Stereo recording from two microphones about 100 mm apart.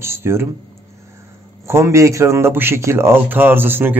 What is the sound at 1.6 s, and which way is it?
A man's voice, 30° right (ahead or behind).